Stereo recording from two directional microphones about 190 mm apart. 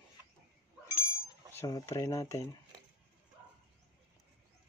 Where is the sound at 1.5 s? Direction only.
15° left (ahead or behind).